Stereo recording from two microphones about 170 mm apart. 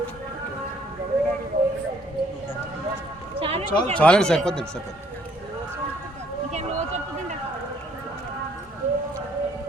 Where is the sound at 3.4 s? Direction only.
35° right (ahead or behind).